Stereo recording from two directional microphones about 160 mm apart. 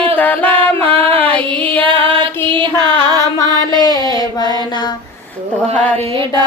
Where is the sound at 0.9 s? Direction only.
35° right (ahead or behind).